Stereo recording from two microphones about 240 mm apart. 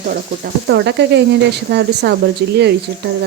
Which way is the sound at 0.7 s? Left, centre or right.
Right.